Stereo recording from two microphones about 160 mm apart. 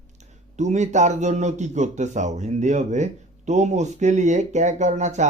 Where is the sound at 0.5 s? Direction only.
45° right (ahead or behind).